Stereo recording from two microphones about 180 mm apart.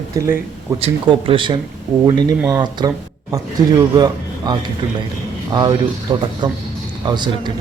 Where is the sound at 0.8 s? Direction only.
30° right (ahead or behind).